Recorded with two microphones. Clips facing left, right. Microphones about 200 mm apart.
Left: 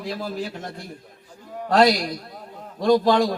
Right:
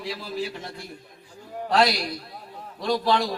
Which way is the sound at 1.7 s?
45° left (ahead or behind).